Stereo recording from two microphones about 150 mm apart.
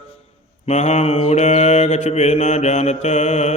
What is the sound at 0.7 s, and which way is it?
Mantra, 45° left (ahead or behind).